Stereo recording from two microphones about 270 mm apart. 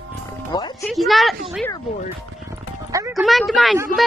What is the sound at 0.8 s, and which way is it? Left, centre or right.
Speech, centre.